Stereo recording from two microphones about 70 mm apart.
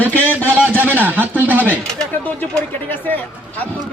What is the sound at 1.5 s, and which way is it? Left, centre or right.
Pigeon, right.